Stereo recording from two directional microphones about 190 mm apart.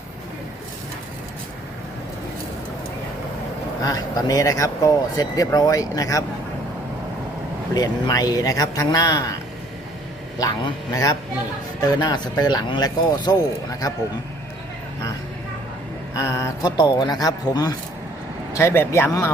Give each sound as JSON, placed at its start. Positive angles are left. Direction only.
{"t": 3.8, "sound": "speech", "side_deg": 20}
{"t": 7.7, "sound": "speech", "side_deg": 20}
{"t": 10.3, "sound": "speech", "side_deg": 20}
{"t": 16.1, "sound": "speech", "side_deg": 15}